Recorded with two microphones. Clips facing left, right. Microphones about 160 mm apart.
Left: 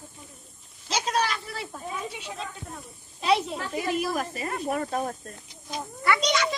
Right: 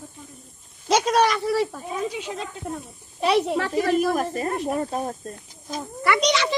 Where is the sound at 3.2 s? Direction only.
65° right (ahead or behind).